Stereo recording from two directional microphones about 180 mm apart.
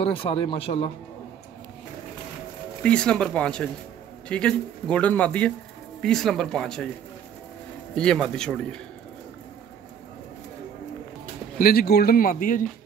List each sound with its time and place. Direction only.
0.0 s speech: 30° left (ahead or behind)
2.8 s speech: 5° left (ahead or behind)
7.9 s speech: 5° left (ahead or behind)
11.5 s speech: 55° left (ahead or behind)